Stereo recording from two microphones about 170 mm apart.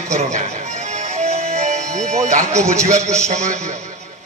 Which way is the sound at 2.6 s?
45° right (ahead or behind).